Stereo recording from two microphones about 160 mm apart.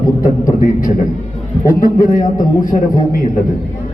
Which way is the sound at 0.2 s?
60° left (ahead or behind).